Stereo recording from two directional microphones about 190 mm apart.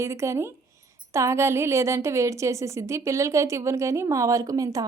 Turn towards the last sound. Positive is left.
turn(degrees=-20)  # may be behind; listen again after turning